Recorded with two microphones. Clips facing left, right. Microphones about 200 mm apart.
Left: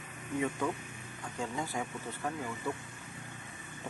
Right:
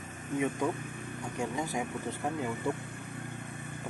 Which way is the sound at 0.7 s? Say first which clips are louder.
Right 3 dB; 55° right (ahead or behind).